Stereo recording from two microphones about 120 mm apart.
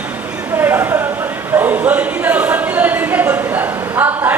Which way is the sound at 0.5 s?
15° right (ahead or behind).